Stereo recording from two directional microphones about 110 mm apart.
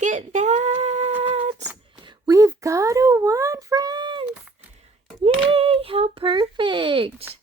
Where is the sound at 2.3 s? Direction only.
30° right (ahead or behind); by 4.2 s 45° right (ahead or behind).